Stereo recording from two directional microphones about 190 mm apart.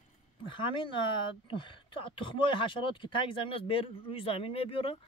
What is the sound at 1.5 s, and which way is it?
Speech, 25° left (ahead or behind).